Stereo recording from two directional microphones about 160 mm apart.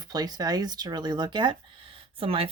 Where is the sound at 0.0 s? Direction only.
25° right (ahead or behind).